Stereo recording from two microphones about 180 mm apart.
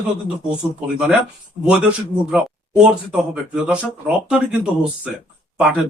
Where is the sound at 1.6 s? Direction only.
5° right (ahead or behind).